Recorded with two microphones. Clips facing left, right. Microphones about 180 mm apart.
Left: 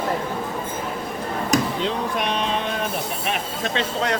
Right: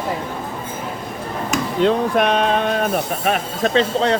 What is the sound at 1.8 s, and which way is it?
Speech, 55° right (ahead or behind).